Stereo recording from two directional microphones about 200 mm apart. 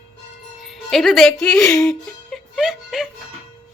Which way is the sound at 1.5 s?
15° left (ahead or behind).